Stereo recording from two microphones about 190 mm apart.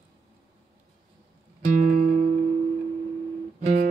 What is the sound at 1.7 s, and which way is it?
Music, 45° right (ahead or behind).